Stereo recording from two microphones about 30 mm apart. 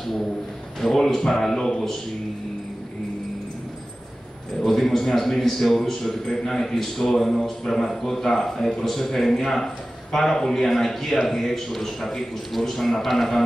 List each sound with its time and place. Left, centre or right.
0.7 s a man's voice: centre
1.5 s a man's voice: left
4.6 s a man's voice: centre